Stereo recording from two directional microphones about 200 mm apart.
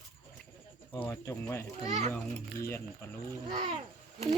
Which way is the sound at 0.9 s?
15° left (ahead or behind).